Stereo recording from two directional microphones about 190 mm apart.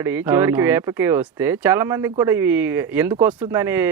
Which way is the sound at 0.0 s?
10° right (ahead or behind).